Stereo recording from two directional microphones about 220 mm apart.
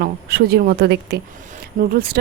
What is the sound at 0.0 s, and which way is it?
Speech, 45° right (ahead or behind).